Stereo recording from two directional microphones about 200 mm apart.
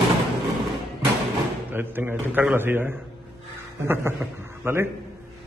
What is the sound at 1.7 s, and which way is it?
A man's voice, 10° right (ahead or behind).